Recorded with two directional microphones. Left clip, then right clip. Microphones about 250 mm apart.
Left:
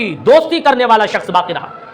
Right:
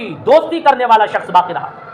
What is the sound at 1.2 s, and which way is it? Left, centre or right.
Speech, left.